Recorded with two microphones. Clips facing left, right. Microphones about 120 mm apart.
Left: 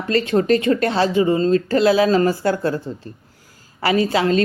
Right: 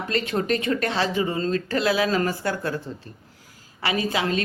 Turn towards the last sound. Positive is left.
turn(degrees=35)  # may be behind; listen again after turning